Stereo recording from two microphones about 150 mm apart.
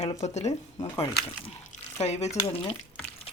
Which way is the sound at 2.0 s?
45° left (ahead or behind).